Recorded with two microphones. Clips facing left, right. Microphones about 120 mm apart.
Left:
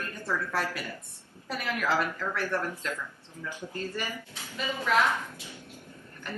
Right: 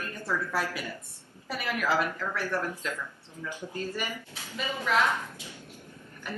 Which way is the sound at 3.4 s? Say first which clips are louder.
Right 1 dB; 15° right (ahead or behind).